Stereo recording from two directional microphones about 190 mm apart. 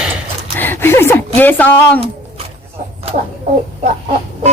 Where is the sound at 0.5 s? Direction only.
10° left (ahead or behind).